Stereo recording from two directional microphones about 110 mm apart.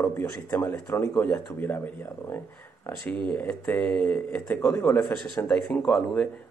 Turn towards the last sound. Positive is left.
turn(degrees=5)  # may be behind; listen again after turning